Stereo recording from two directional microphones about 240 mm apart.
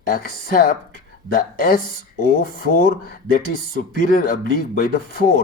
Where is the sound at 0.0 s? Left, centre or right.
Left.